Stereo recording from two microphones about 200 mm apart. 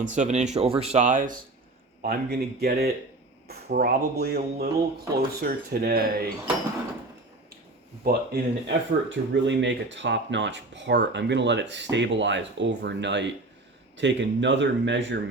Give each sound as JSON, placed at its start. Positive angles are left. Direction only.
{"t": 0.0, "sound": "speech", "side_deg": -35}
{"t": 8.0, "sound": "speech", "side_deg": -55}